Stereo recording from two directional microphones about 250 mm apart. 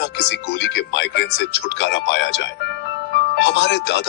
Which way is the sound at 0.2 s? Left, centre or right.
Left.